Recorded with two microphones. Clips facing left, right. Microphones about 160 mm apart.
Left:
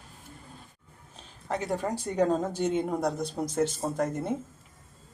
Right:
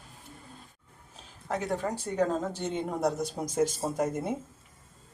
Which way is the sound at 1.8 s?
15° left (ahead or behind).